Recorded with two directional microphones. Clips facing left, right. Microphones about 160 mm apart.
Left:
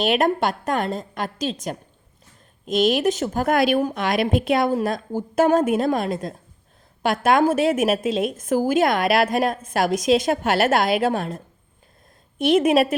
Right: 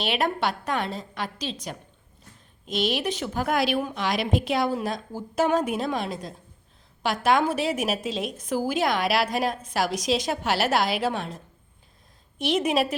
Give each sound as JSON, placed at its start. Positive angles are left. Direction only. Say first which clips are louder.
{"t": 0.0, "sound": "a woman's voice", "louder": "left 6 dB", "side_deg": 45}